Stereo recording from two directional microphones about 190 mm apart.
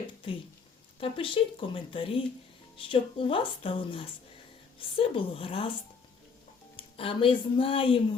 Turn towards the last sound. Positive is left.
turn(degrees=30)  # may be behind; listen again after turning